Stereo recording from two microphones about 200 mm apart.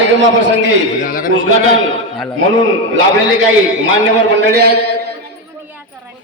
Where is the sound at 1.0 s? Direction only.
45° left (ahead or behind).